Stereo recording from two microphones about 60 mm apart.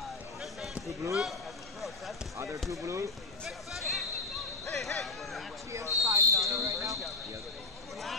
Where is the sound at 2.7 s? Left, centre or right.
Right.